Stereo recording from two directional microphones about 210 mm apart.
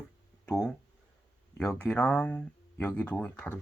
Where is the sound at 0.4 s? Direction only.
5° left (ahead or behind).